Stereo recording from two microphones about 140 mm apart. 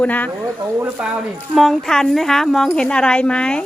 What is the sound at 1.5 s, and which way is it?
A woman's voice, centre (ahead or behind).